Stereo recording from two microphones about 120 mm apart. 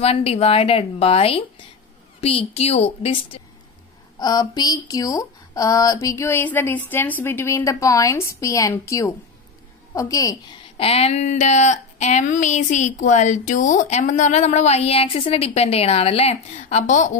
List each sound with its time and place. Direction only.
0.0 s speech: 55° left (ahead or behind)
4.2 s speech: 35° left (ahead or behind)
10.8 s speech: 55° left (ahead or behind); by 17.2 s 90° left